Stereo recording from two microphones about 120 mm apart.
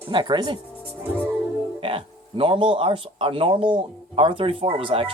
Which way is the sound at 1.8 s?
50° right (ahead or behind).